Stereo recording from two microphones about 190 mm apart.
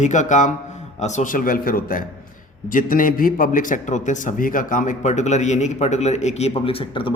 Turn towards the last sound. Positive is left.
turn(degrees=30)  # may be behind; listen again after turning